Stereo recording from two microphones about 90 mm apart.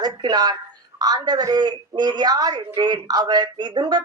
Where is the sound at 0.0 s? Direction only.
50° right (ahead or behind).